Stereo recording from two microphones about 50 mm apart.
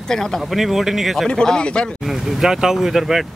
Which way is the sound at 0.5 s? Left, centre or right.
Centre.